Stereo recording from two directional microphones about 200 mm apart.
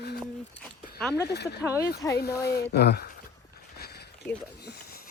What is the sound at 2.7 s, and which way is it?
Speech, 55° left (ahead or behind).